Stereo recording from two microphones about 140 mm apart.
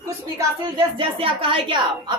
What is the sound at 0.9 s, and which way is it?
A woman's voice, 40° right (ahead or behind).